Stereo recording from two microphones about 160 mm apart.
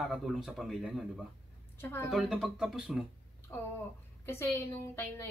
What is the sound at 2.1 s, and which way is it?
Speech, centre (ahead or behind).